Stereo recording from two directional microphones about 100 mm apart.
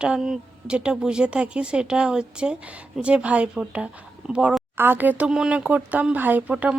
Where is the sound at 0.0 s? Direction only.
5° right (ahead or behind).